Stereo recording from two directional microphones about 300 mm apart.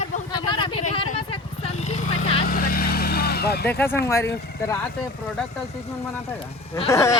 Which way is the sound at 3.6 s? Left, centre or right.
Centre.